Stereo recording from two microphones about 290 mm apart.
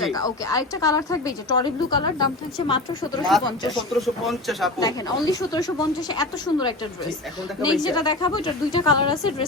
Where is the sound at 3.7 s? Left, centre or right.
Centre.